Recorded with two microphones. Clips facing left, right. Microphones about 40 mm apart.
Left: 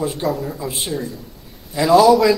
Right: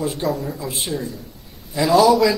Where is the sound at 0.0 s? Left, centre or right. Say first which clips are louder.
Left 1 dB; centre.